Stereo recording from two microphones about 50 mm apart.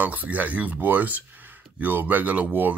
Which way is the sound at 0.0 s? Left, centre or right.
Right.